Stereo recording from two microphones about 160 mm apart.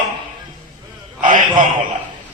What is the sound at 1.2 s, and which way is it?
Speech, 55° right (ahead or behind).